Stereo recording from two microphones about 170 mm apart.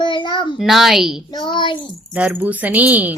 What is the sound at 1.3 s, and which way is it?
Child singing, 25° left (ahead or behind).